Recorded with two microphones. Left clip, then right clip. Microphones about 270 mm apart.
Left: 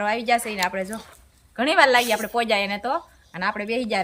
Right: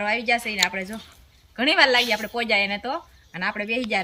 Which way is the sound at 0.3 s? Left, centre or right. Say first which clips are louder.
Even; centre.